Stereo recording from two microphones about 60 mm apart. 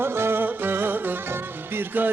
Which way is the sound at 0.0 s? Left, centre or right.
Right.